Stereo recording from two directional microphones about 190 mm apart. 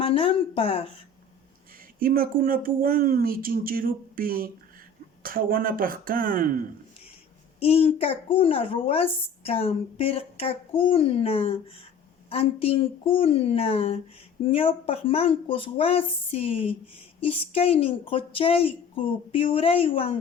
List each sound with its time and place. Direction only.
0.0 s a sound: 30° left (ahead or behind)
2.0 s speech: 50° right (ahead or behind)
7.6 s a child's voice: 30° left (ahead or behind)